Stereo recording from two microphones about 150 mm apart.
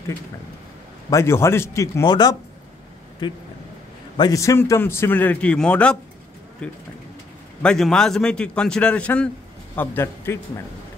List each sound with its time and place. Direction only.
1.1 s speech: 15° left (ahead or behind)
4.2 s a man's voice: 20° left (ahead or behind)